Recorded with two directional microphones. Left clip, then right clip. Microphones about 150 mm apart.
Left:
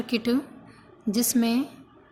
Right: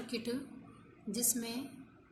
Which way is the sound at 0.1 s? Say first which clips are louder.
Left 14 dB; 50° left (ahead or behind).